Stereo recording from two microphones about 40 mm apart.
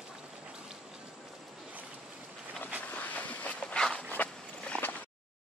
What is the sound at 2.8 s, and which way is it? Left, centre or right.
Vehicle, left.